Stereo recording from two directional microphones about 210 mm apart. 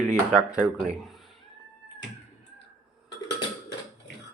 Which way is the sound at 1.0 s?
Centre (ahead or behind).